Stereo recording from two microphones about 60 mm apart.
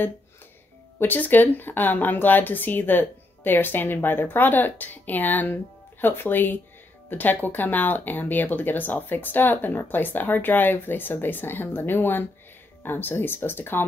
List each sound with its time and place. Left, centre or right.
0.9 s speech: left